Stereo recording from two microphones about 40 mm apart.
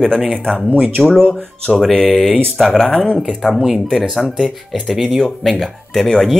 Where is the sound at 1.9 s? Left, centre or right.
Centre.